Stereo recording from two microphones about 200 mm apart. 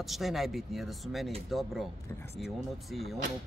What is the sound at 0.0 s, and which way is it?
Speech, centre (ahead or behind).